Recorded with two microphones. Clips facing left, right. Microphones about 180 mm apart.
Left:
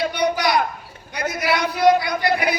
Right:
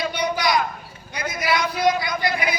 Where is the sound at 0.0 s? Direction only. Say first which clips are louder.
Left 3 dB; 60° left (ahead or behind).